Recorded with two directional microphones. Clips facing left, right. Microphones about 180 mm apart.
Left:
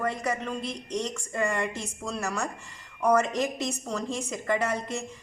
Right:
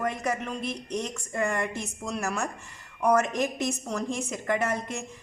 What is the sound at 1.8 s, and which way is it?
Speech, 15° right (ahead or behind).